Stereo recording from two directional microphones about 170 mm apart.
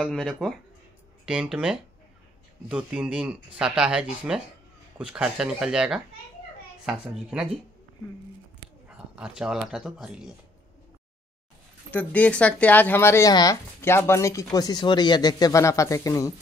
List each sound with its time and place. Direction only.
0.0 s speech: centre (ahead or behind)
8.9 s speech: 5° right (ahead or behind)
11.9 s speech: 10° left (ahead or behind)